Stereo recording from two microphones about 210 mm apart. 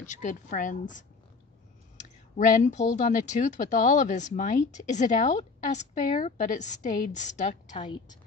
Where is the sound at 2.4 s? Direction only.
35° left (ahead or behind).